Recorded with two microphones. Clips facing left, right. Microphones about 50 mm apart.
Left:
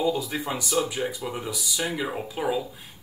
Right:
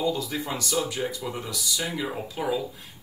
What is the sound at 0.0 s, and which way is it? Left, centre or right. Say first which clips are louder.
Speech: left 2 dB; centre.